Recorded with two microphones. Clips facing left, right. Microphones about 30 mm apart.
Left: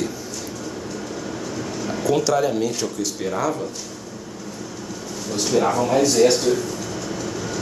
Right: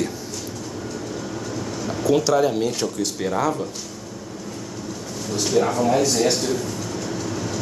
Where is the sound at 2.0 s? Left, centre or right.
Centre.